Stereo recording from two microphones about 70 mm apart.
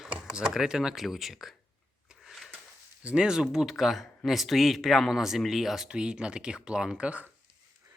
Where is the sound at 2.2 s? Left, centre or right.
Centre.